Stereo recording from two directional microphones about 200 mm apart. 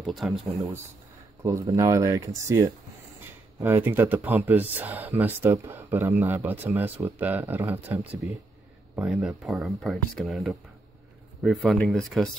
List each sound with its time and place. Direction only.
0.0 s speech: centre (ahead or behind)
1.4 s speech: 15° right (ahead or behind); by 12.3 s centre (ahead or behind)